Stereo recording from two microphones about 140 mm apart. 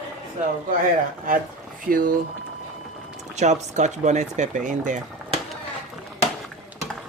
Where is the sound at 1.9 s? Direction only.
80° right.